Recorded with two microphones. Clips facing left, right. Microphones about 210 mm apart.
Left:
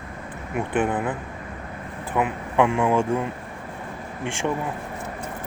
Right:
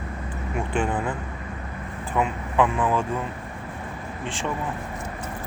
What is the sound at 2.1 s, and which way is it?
Speech, 15° left (ahead or behind).